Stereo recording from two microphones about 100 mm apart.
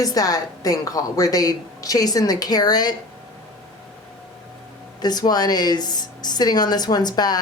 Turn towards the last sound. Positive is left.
turn(degrees=40)  # may be behind; listen again after turning